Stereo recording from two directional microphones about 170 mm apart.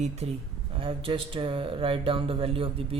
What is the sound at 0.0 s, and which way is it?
Speech, 40° right (ahead or behind).